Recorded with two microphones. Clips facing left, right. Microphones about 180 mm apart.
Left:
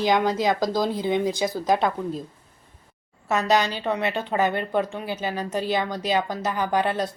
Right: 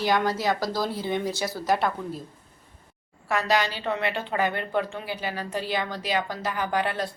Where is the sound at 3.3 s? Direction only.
20° left (ahead or behind).